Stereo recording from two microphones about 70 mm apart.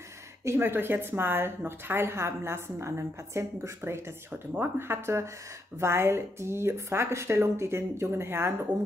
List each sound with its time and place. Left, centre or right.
0.5 s a woman's voice: right